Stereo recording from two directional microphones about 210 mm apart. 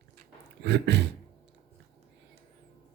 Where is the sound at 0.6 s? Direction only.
55° right (ahead or behind).